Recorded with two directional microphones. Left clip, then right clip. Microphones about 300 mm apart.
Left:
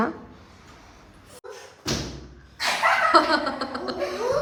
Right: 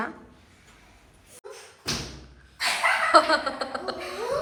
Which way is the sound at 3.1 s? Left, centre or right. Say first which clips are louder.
Even; centre.